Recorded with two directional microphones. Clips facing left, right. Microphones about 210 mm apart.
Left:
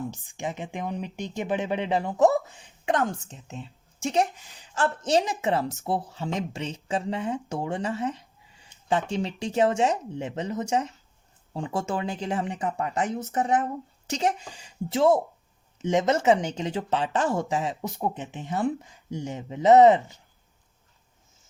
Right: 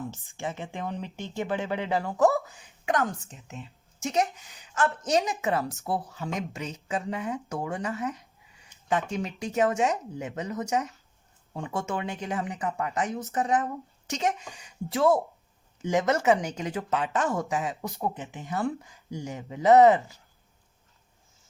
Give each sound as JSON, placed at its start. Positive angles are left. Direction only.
{"t": 0.1, "sound": "speech", "side_deg": 15}
{"t": 17.9, "sound": "speech", "side_deg": 15}